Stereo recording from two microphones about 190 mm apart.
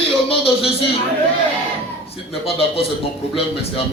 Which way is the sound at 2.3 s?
30° left (ahead or behind).